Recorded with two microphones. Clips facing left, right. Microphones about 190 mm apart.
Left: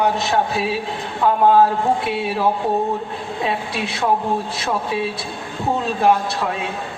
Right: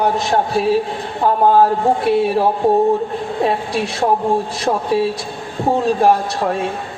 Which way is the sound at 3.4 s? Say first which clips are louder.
Right 3 dB; 40° right (ahead or behind).